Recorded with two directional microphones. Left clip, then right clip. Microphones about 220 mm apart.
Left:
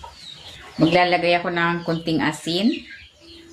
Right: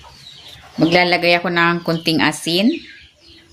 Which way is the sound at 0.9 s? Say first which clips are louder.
Right 4 dB; 55° right (ahead or behind).